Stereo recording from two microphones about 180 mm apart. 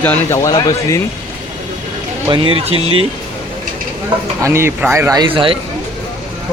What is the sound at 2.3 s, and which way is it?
Speech, 30° right (ahead or behind).